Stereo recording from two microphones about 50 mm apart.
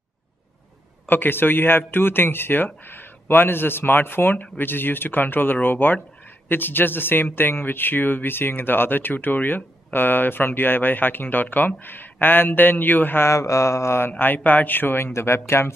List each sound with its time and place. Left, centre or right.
1.0 s speech: left
13.3 s mantra: left
14.0 s speech: left